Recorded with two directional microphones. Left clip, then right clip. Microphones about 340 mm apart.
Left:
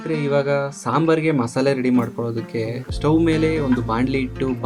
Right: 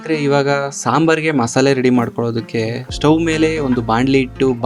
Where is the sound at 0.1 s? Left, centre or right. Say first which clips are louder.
Right 5 dB; right.